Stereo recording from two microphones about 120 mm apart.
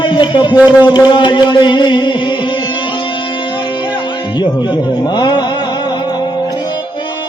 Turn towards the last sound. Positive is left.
turn(degrees=35)  # may be behind; listen again after turning